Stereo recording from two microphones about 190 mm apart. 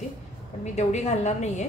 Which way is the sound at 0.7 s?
35° left (ahead or behind).